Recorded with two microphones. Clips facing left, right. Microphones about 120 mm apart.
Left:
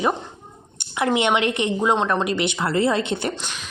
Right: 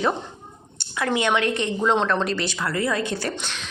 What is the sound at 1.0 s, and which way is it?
A woman's voice, 20° left (ahead or behind).